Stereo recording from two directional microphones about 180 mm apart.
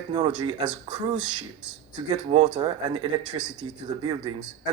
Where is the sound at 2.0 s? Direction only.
25° right (ahead or behind).